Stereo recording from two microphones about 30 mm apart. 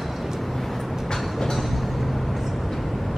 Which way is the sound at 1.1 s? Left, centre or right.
Centre.